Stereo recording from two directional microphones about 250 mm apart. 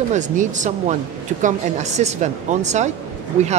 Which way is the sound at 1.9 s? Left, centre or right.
Right.